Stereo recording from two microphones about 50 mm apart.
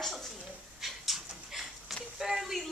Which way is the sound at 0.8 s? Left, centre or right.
Centre.